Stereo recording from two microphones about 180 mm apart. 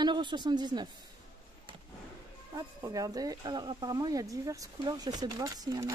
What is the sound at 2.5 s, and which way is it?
Speech, 20° right (ahead or behind).